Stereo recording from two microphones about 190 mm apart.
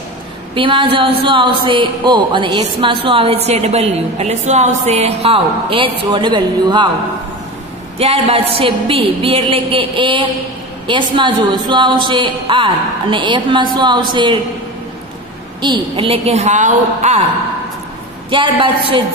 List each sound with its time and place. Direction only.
0.6 s a woman's voice: 25° right (ahead or behind)
8.0 s a woman's voice: 30° right (ahead or behind)
15.6 s a woman's voice: 25° right (ahead or behind)
18.3 s a woman's voice: 25° right (ahead or behind)